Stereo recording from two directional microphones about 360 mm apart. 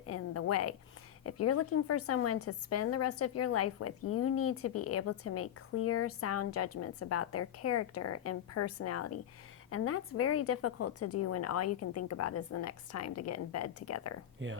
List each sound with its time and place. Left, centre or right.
0.0 s a sound: left
1.2 s a woman's voice: left
14.4 s speech: right